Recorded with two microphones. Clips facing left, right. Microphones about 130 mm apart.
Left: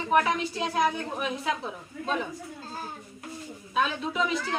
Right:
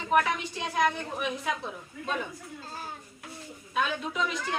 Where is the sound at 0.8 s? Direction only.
5° left (ahead or behind).